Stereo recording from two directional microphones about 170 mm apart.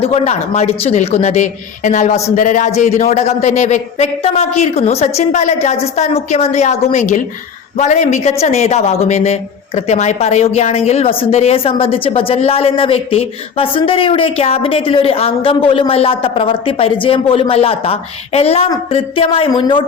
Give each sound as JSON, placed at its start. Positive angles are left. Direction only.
{"t": 0.0, "sound": "a man's voice", "side_deg": 40}